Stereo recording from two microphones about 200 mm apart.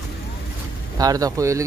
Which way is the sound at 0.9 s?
15° right (ahead or behind).